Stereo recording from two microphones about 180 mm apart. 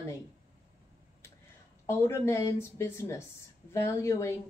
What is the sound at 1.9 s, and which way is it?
Speech, 15° left (ahead or behind).